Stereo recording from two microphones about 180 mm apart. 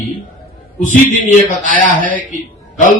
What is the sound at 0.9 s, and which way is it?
A man's voice, 50° left (ahead or behind).